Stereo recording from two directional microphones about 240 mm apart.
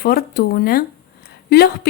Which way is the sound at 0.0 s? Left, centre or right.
Left.